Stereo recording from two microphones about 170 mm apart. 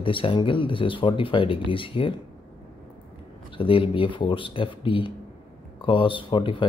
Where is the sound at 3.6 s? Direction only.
30° left (ahead or behind).